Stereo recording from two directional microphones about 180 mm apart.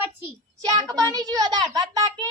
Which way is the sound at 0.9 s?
20° right (ahead or behind).